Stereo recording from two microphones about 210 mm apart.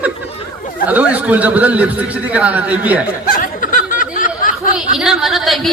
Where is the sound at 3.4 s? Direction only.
40° left (ahead or behind).